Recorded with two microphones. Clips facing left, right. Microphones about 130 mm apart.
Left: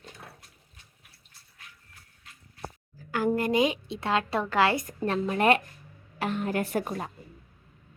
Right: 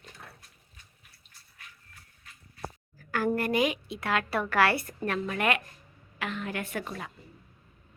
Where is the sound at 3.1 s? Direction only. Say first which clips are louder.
Left 2 dB; 15° left (ahead or behind).